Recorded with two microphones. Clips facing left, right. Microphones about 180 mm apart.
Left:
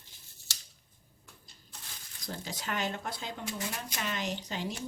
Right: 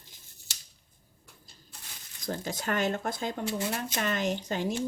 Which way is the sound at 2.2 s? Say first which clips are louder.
Right 6 dB; 50° right (ahead or behind).